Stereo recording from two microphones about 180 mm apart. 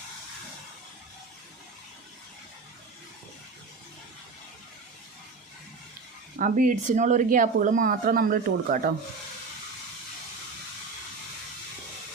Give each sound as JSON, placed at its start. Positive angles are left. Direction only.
{"t": 6.4, "sound": "speech", "side_deg": -45}